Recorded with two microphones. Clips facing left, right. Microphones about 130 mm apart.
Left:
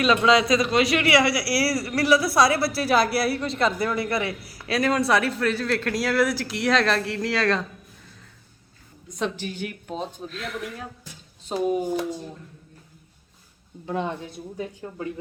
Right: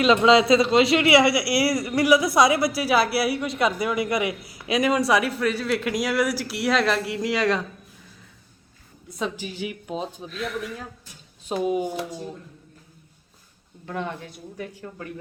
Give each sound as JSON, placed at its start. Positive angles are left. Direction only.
{"t": 0.0, "sound": "a woman's voice", "side_deg": -20}
{"t": 9.1, "sound": "speech", "side_deg": -5}
{"t": 13.8, "sound": "speech", "side_deg": 20}